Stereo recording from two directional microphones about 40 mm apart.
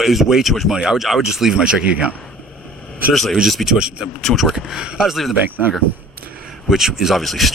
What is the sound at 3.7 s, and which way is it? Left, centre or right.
Speech, right.